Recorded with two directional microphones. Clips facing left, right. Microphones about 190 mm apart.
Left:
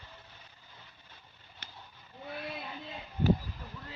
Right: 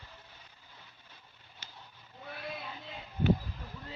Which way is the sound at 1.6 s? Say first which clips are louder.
Left 2 dB; 60° left (ahead or behind).